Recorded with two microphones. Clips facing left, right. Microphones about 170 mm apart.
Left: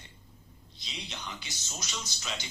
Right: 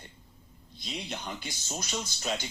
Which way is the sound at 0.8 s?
50° right (ahead or behind).